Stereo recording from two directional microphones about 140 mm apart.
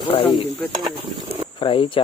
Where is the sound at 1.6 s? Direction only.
40° left (ahead or behind).